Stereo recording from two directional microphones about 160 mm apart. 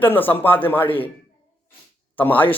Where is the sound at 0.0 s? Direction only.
10° left (ahead or behind).